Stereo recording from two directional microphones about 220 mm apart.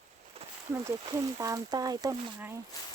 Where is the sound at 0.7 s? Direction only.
15° right (ahead or behind).